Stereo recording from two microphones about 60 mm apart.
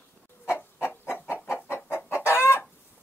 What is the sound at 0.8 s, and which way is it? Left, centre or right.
Chicken, left.